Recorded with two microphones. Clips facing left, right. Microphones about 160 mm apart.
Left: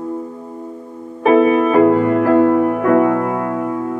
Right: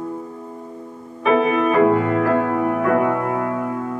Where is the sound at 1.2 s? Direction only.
40° left (ahead or behind).